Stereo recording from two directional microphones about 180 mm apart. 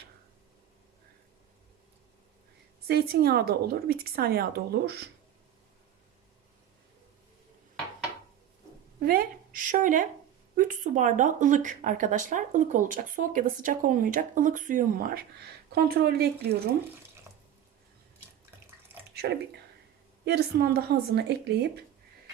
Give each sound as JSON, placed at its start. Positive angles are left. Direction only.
{"t": 2.8, "sound": "a woman's voice", "side_deg": -60}
{"t": 9.0, "sound": "speech", "side_deg": -50}
{"t": 18.9, "sound": "bathtub", "side_deg": -10}
{"t": 20.2, "sound": "a woman's voice", "side_deg": -60}